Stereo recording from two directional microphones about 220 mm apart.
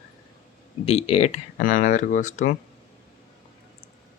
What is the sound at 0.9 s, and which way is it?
Speech, 30° left (ahead or behind).